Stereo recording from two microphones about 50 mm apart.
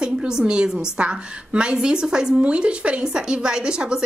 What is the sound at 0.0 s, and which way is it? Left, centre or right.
A woman's voice, centre.